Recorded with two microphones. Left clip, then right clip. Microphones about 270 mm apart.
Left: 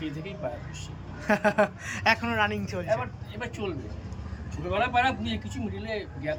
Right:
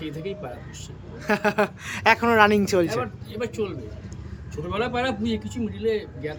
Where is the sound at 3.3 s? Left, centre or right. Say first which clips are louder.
Right 6 dB; centre.